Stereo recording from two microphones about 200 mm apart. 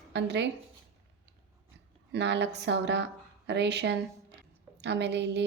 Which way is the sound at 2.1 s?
60° right (ahead or behind).